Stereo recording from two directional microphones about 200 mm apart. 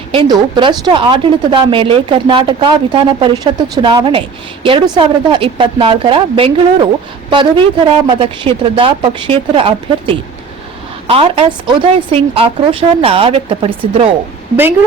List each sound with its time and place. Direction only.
0.1 s a woman's voice: 25° right (ahead or behind)